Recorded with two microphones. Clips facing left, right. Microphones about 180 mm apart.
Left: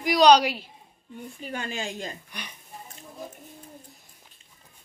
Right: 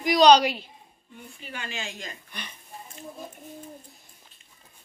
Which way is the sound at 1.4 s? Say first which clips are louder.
Left 4 dB; 40° left (ahead or behind).